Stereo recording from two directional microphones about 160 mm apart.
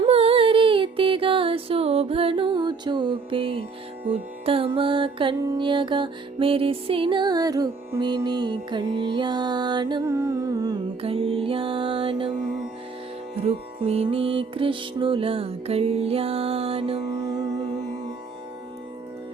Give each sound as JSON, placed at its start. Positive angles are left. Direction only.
{"t": 0.0, "sound": "music", "side_deg": -40}
{"t": 11.0, "sound": "music", "side_deg": -35}
{"t": 13.3, "sound": "music", "side_deg": -40}
{"t": 17.1, "sound": "music", "side_deg": -25}